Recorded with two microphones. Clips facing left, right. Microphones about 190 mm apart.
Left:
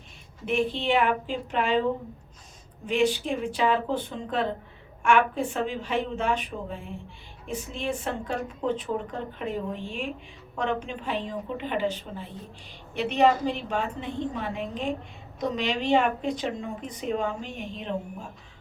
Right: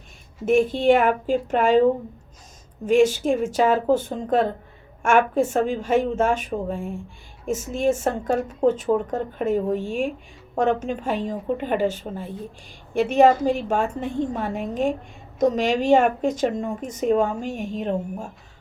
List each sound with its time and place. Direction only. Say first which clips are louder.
0.4 s speech: right 9 dB; 45° right (ahead or behind)
2.8 s speech: right 7 dB; 45° right (ahead or behind)